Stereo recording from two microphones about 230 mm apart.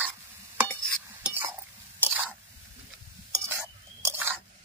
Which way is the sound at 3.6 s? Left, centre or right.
Centre.